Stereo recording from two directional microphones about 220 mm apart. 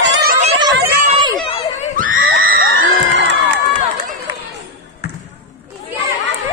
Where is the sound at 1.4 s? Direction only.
25° left (ahead or behind).